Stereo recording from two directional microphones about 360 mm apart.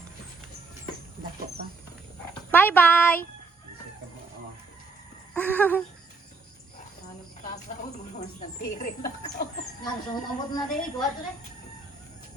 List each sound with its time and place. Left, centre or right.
2.5 s a sound: centre
5.3 s speech: centre
8.2 s speech: left
9.8 s speech: centre